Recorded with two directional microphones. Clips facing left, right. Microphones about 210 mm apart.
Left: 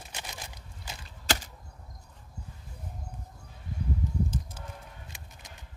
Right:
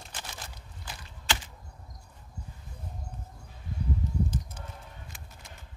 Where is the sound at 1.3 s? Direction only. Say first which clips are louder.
Left 2 dB; 40° left (ahead or behind).